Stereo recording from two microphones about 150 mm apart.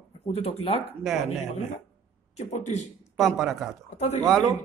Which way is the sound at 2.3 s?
50° left (ahead or behind).